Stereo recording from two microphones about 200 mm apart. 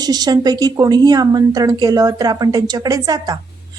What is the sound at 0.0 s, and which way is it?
A woman's voice, 20° right (ahead or behind).